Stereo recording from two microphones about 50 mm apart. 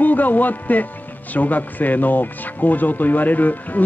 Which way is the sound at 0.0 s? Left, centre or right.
Left.